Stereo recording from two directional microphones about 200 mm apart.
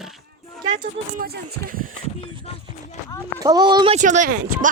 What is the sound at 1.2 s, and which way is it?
Speech, 50° right (ahead or behind).